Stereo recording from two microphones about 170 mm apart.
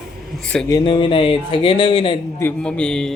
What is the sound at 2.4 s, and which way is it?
Speech, 10° left (ahead or behind).